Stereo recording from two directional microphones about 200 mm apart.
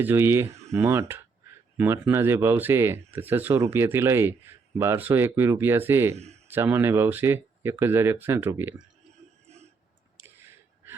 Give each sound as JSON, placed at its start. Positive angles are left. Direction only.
{"t": 0.0, "sound": "speech", "side_deg": -10}
{"t": 6.1, "sound": "a man's voice", "side_deg": -35}
{"t": 6.5, "sound": "speech", "side_deg": -10}
{"t": 10.2, "sound": "gasp", "side_deg": -10}